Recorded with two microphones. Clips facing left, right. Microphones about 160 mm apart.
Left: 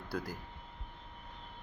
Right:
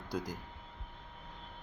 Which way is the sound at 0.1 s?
15° right (ahead or behind).